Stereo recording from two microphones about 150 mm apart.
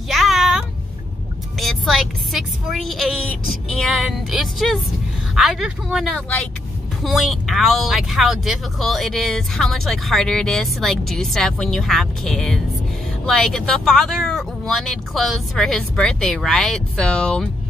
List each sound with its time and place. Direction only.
0.1 s music: centre (ahead or behind)
1.6 s speech: centre (ahead or behind)